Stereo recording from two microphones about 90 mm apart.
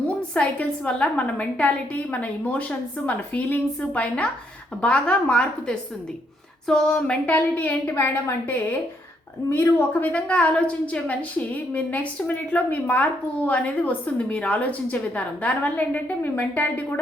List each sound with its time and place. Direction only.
0.2 s a woman's voice: 10° left (ahead or behind); by 10.1 s 25° left (ahead or behind)
10.1 s a woman's voice: 15° left (ahead or behind)